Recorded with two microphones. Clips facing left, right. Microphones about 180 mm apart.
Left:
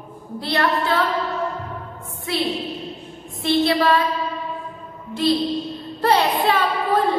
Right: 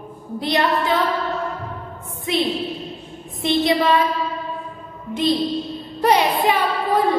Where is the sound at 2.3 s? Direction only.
20° right (ahead or behind).